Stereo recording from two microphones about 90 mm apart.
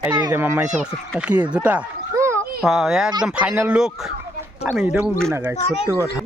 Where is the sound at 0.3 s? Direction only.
20° right (ahead or behind).